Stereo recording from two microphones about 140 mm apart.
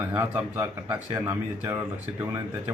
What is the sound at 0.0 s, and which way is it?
A man's voice, 15° right (ahead or behind).